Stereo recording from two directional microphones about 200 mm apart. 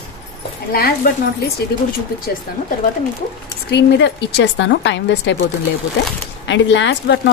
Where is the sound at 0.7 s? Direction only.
50° left (ahead or behind).